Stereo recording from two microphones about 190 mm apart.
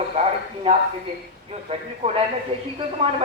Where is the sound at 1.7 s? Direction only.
30° right (ahead or behind).